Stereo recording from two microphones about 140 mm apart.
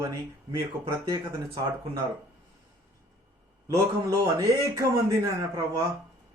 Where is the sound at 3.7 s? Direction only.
25° right (ahead or behind).